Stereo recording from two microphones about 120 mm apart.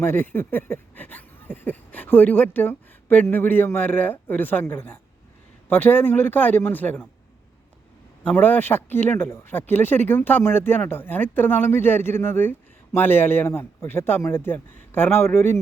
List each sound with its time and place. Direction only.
0.0 s speech: 20° left (ahead or behind)
8.2 s speech: 15° left (ahead or behind)